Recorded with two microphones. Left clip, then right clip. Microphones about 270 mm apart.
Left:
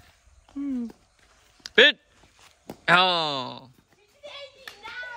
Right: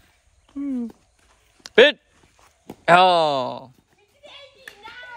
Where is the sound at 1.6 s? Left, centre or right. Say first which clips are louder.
Right 3 dB; centre.